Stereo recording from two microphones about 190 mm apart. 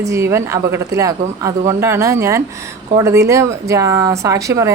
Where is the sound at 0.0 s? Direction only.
15° right (ahead or behind).